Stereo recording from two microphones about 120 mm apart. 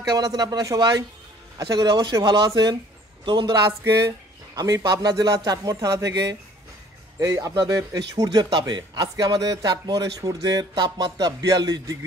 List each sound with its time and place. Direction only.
0.1 s speech: 30° right (ahead or behind)
3.8 s speech: 25° right (ahead or behind)